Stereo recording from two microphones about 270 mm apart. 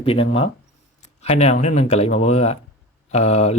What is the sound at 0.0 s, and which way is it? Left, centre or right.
Speech, left.